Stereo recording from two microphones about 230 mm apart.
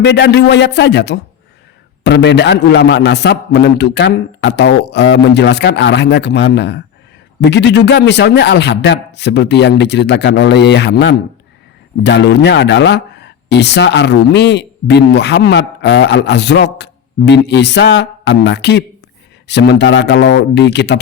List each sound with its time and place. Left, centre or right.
0.0 s speech: left